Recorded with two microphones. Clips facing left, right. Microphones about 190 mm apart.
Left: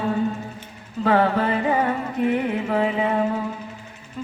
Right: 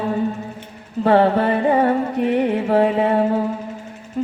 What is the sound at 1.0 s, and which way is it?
Music, 30° right (ahead or behind).